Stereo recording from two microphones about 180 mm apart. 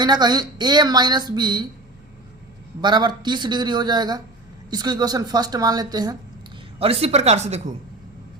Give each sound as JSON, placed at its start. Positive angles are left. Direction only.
{"t": 0.0, "sound": "a woman's voice", "side_deg": -25}
{"t": 2.8, "sound": "a woman's voice", "side_deg": -25}
{"t": 6.7, "sound": "speech", "side_deg": -35}